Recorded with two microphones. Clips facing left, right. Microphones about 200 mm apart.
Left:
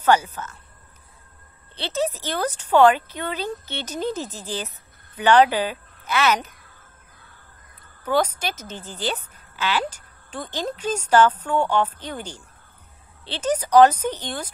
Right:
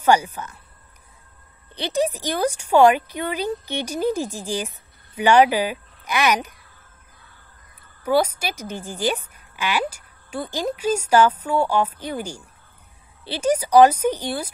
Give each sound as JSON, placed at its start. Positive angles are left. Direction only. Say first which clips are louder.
{"t": 0.0, "sound": "speech", "louder": "right 1 dB", "side_deg": -15}
{"t": 1.8, "sound": "speech", "louder": "right 3 dB", "side_deg": -15}
{"t": 8.0, "sound": "speech", "louder": "right 2 dB", "side_deg": -10}